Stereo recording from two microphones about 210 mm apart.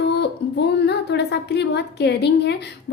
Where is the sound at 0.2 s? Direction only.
55° left (ahead or behind).